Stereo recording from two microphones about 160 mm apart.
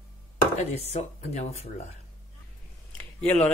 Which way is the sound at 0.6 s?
45° left (ahead or behind).